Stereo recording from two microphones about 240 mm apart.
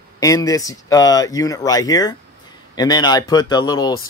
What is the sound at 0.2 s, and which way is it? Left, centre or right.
Speech, centre.